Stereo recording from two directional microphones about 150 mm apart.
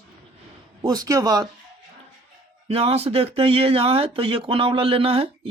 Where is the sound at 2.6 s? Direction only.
40° right (ahead or behind).